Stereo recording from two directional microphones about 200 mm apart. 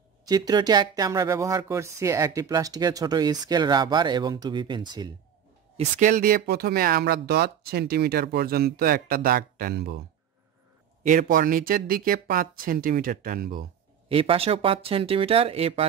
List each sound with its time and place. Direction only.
0.2 s speech: 20° right (ahead or behind)
5.8 s speech: 40° right (ahead or behind)
11.1 s speech: 45° right (ahead or behind)
14.0 s speech: 30° right (ahead or behind)